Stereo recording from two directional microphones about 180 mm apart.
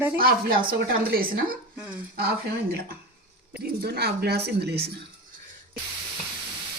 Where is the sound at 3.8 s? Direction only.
60° right (ahead or behind).